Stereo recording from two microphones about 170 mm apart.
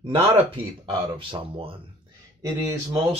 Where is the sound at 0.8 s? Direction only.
30° right (ahead or behind).